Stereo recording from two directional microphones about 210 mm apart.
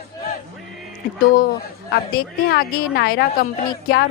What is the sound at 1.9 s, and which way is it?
A woman's voice, 45° left (ahead or behind).